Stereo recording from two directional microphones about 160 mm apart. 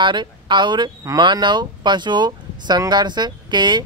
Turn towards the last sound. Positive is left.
turn(degrees=-30)  # may be behind; listen again after turning